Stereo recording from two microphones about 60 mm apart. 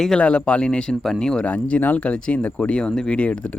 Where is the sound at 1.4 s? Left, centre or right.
Left.